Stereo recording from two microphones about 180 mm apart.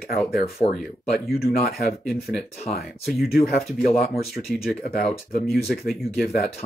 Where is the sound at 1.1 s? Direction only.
60° left (ahead or behind).